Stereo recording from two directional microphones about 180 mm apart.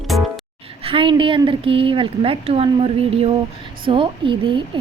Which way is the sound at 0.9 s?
30° right (ahead or behind).